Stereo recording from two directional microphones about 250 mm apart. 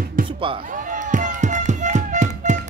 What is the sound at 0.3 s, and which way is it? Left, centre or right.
Speech, right.